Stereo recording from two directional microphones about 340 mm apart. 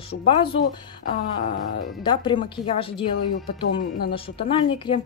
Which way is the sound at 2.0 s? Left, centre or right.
Centre.